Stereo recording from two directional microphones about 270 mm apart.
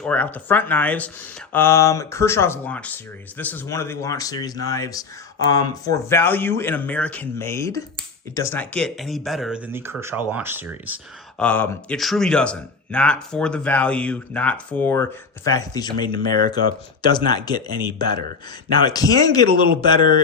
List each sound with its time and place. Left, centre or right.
0.0 s speech: centre
11.4 s speech: centre